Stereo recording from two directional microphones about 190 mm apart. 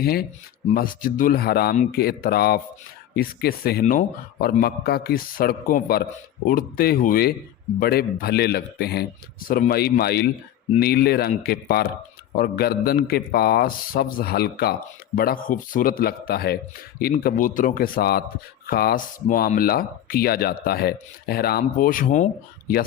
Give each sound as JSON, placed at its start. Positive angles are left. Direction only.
{"t": 0.0, "sound": "a man's voice", "side_deg": 55}